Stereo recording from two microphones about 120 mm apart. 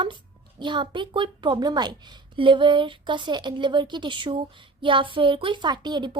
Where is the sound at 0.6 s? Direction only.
40° right (ahead or behind).